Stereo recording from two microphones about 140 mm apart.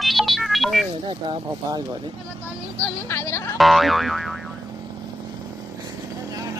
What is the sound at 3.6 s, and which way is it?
Boing, centre (ahead or behind).